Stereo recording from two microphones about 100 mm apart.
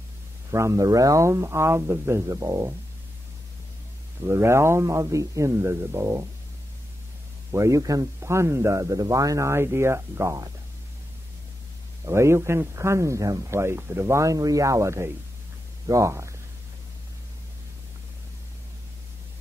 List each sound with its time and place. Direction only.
0.5 s speech: 30° right (ahead or behind)
4.2 s speech: 25° right (ahead or behind)
7.5 s speech: 30° right (ahead or behind)
12.1 s speech: 25° right (ahead or behind)